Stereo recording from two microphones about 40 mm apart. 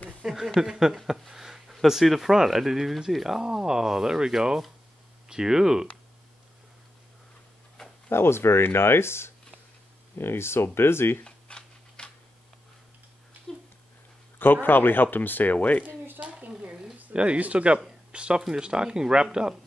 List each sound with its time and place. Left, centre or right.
0.2 s speech: centre
1.3 s a sound: centre
1.9 s speech: centre
8.1 s speech: left
11.2 s scissors: left
14.4 s speech: left
16.2 s a sound: right
16.7 s a sound: centre
17.2 s speech: right